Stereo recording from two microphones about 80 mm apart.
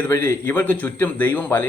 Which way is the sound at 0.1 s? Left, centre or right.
Left.